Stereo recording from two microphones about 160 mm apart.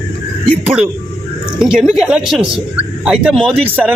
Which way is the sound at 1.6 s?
5° right (ahead or behind).